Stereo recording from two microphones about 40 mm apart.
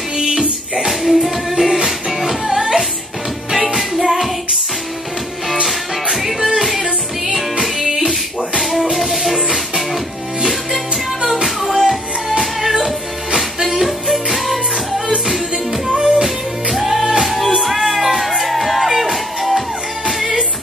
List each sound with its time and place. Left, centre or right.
0.2 s music: centre
0.7 s music: centre
5.7 s music: centre
15.0 s music: centre
16.7 s music: centre